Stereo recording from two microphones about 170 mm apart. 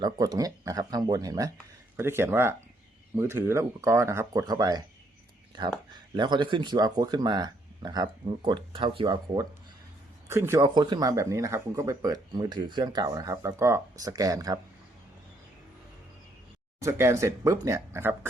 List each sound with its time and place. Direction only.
0.0 s speech: 20° right (ahead or behind)
6.1 s speech: 25° right (ahead or behind)
16.8 s speech: 15° right (ahead or behind)